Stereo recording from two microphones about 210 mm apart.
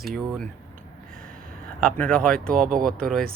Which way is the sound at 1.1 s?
5° left (ahead or behind).